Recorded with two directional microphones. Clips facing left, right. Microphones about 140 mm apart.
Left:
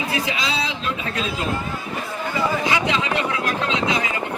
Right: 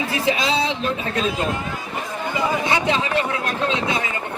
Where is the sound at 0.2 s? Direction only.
25° right (ahead or behind).